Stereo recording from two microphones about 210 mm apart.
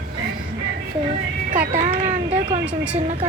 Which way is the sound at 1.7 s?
30° right (ahead or behind).